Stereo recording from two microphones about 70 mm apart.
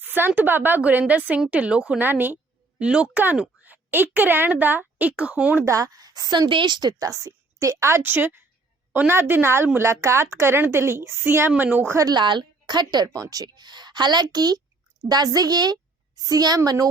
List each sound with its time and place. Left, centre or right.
0.0 s a woman's voice: right
2.0 s a woman's voice: right
2.7 s speech: centre
5.6 s a woman's voice: right
7.1 s a woman's voice: right
12.0 s speech: right
13.2 s a woman's voice: right